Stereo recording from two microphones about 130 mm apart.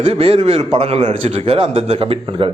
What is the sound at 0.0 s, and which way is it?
Speech, 50° right (ahead or behind).